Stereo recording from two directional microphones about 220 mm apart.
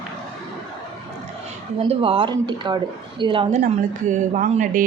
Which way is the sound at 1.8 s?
25° right (ahead or behind).